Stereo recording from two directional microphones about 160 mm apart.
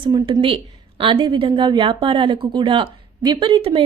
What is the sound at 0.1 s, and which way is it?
Speech, 25° right (ahead or behind).